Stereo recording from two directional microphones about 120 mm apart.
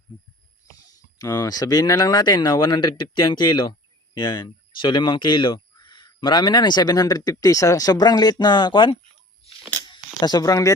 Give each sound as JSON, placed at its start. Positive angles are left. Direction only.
{"t": 1.2, "sound": "speech", "side_deg": 30}
{"t": 10.2, "sound": "speech", "side_deg": 35}